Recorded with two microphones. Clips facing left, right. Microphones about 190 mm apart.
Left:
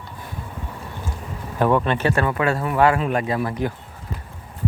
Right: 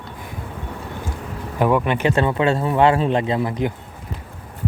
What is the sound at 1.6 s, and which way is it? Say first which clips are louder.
Speech: right 1 dB; 15° right (ahead or behind).